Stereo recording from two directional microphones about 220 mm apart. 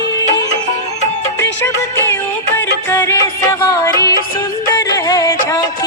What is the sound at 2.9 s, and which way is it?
Music, 10° left (ahead or behind).